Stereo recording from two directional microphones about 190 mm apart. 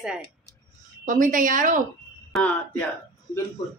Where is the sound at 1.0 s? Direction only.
45° right (ahead or behind).